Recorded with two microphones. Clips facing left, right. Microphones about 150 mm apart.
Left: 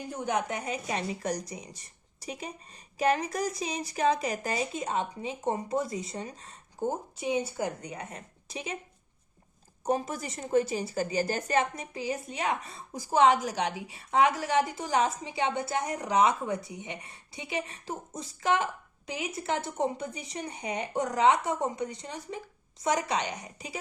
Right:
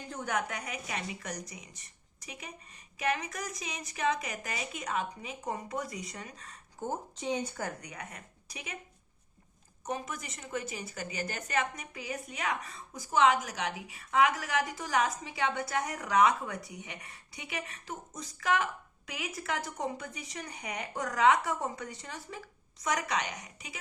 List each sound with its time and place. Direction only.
0.1 s a woman's voice: 20° left (ahead or behind)
6.8 s speech: 10° left (ahead or behind)
7.8 s a woman's voice: 25° left (ahead or behind)
9.8 s a woman's voice: 35° left (ahead or behind)